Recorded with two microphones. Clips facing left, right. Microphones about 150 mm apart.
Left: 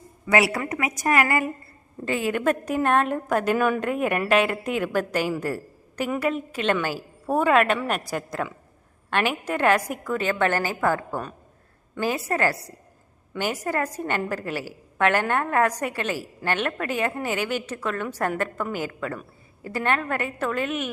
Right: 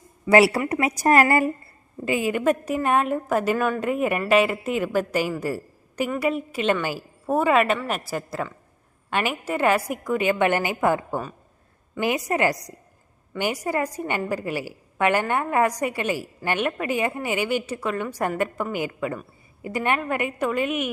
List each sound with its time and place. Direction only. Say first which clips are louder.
0.3 s a woman's voice: right 5 dB; 30° right (ahead or behind)
2.0 s a woman's voice: right 2 dB; 10° right (ahead or behind)